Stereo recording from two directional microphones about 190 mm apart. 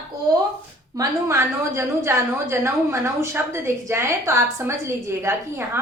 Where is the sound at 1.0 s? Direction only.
15° right (ahead or behind).